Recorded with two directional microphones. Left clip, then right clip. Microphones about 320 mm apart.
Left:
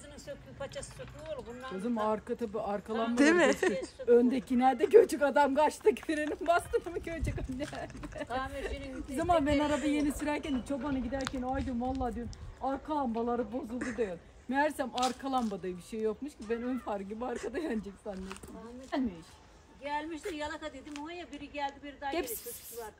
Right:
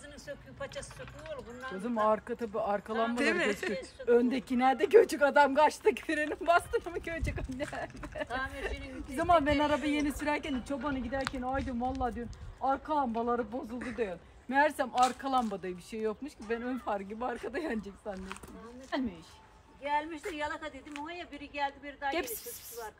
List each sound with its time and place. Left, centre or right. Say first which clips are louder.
1.3 s speech: left 1 dB; centre
1.8 s speech: right 4 dB; centre